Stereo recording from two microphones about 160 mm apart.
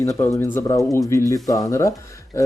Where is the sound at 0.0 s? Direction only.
15° left (ahead or behind).